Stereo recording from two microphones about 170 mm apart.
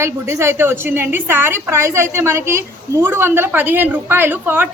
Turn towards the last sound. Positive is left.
turn(degrees=-10)  # may be behind; listen again after turning